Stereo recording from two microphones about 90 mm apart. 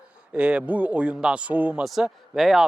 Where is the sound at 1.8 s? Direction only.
5° right (ahead or behind).